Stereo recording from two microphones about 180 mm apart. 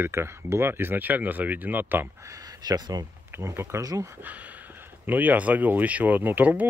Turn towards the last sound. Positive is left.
turn(degrees=-10)  # may be behind; listen again after turning